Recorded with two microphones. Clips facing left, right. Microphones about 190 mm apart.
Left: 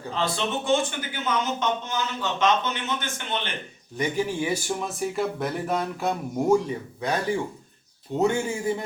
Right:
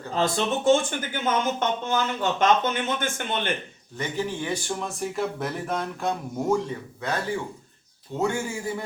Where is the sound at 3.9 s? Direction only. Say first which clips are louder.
Left 3 dB; 10° left (ahead or behind).